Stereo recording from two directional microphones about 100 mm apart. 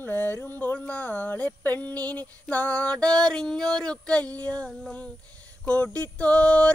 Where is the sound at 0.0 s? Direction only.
20° left (ahead or behind).